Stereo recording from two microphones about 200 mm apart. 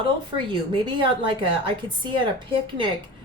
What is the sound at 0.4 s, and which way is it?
Speech, 25° right (ahead or behind).